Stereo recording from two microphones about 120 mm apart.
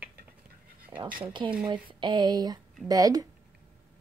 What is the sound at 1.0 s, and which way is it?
Speech, 10° right (ahead or behind).